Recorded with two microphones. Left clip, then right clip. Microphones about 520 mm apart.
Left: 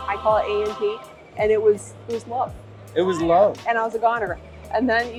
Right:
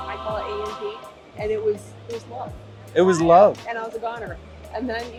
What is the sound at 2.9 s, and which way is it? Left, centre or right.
Speech, right.